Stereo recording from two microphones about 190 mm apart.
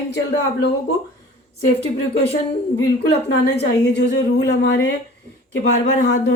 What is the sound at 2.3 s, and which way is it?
A woman's voice, 60° left (ahead or behind).